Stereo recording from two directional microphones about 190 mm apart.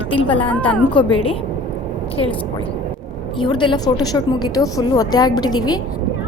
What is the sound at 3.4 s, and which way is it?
A woman's voice, 25° left (ahead or behind).